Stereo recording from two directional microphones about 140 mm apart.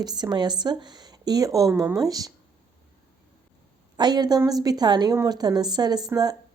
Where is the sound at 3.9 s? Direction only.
30° right (ahead or behind).